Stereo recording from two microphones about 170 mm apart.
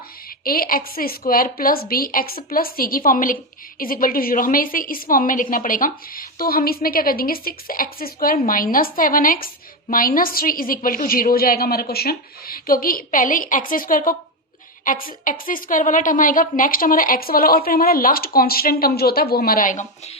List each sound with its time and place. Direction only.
0.4 s a woman's voice: 60° left (ahead or behind)